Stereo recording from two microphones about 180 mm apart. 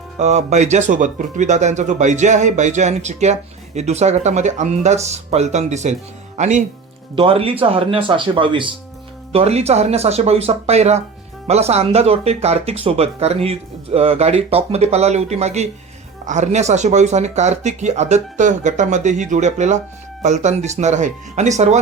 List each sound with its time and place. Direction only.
0.2 s speech: 40° right (ahead or behind)
7.2 s speech: 30° right (ahead or behind)